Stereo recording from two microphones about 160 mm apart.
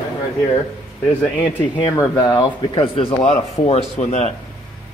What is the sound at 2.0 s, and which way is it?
Speech, 25° left (ahead or behind).